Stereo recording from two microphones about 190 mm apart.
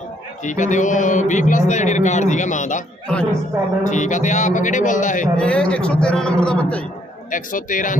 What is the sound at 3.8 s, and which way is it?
A man's voice, 40° left (ahead or behind).